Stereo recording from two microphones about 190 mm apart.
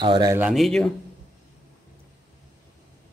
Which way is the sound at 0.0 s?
20° right (ahead or behind).